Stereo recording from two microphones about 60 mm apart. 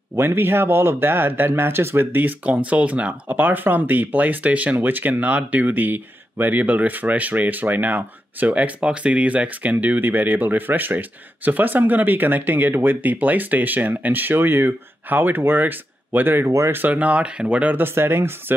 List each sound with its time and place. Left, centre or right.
0.1 s speech: right
16.9 s speech: right